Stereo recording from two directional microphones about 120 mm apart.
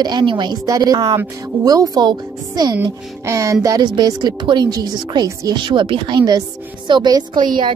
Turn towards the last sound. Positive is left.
turn(degrees=-45)  # may be behind; listen again after turning